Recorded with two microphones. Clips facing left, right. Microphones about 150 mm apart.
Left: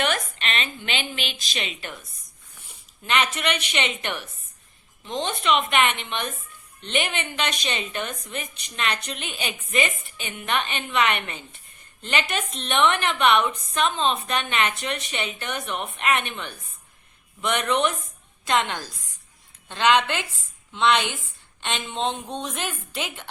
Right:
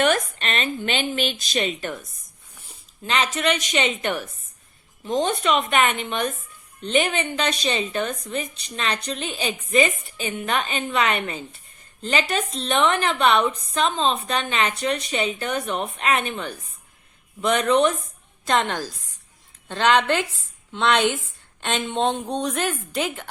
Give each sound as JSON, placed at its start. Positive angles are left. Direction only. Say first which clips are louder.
{"t": 0.0, "sound": "speech", "louder": "right 5 dB", "side_deg": -45}
{"t": 3.0, "sound": "a woman's voice", "louder": "right 2 dB", "side_deg": -30}